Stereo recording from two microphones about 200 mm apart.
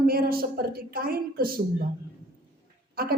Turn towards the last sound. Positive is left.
turn(degrees=-50)  # may be behind; listen again after turning